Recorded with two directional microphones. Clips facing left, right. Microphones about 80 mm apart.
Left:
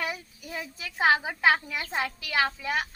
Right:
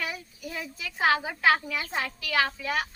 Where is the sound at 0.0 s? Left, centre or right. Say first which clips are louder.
Left 1 dB; left.